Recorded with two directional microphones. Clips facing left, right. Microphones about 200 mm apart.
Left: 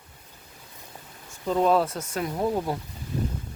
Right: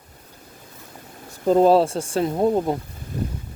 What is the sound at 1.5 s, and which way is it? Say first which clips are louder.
Speech: right 7 dB; 35° right (ahead or behind).